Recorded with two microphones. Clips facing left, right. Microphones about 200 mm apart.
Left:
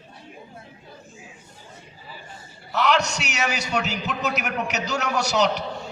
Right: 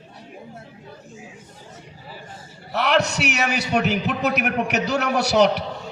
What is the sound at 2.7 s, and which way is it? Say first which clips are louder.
A man's voice: right 2 dB; 60° right (ahead or behind).